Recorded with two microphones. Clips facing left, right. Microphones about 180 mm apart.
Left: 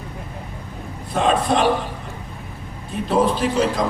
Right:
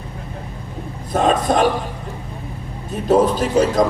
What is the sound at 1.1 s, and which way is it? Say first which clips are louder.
Speech: right 2 dB; 45° right (ahead or behind).